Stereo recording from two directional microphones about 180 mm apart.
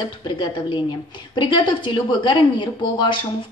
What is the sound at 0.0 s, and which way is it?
Speech, 25° left (ahead or behind).